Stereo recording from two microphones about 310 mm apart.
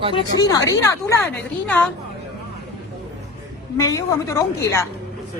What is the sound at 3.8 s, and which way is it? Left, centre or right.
Speech, centre.